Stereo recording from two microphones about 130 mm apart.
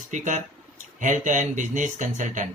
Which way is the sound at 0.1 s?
70° right (ahead or behind).